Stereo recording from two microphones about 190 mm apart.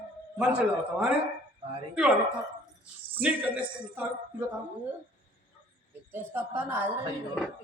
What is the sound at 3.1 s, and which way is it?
Speech, 5° right (ahead or behind).